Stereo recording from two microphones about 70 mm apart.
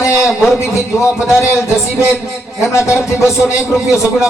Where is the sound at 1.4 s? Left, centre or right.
Left.